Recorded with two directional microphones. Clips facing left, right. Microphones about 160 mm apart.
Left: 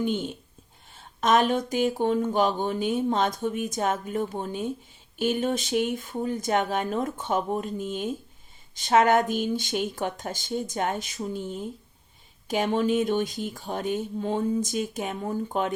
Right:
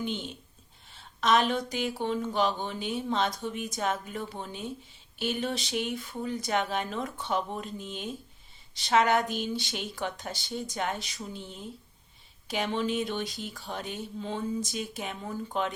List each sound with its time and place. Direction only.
0.0 s speech: 50° left (ahead or behind)